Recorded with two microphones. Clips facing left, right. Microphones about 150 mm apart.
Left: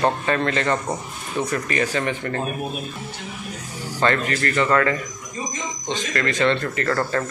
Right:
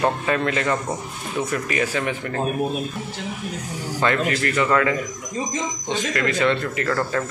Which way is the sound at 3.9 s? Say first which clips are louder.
Even; 10° right (ahead or behind).